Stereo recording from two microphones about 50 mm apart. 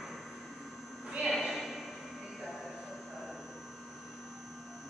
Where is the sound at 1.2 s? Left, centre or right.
Centre.